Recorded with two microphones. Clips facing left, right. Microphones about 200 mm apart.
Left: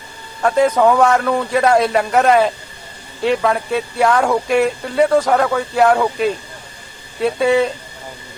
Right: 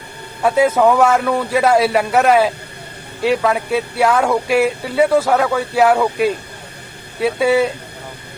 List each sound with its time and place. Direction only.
0.4 s a man's voice: 5° right (ahead or behind)